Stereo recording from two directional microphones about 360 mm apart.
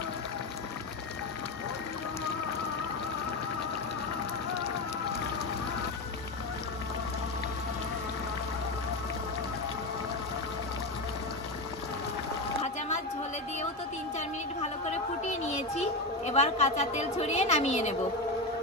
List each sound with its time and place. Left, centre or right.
16.3 s a woman's voice: centre